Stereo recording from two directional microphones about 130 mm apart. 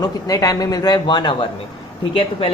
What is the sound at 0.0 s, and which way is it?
A woman's voice, 30° left (ahead or behind).